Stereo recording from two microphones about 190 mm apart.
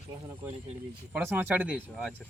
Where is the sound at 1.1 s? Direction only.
10° right (ahead or behind).